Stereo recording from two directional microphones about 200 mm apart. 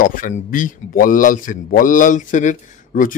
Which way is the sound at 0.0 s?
45° left (ahead or behind).